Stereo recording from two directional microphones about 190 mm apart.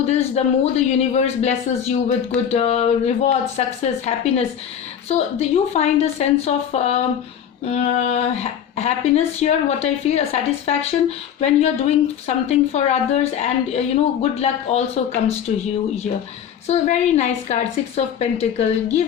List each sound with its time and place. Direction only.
0.0 s a woman's voice: 35° left (ahead or behind)
16.6 s a woman's voice: 35° left (ahead or behind)